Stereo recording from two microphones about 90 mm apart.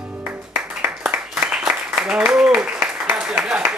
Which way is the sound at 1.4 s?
10° right (ahead or behind).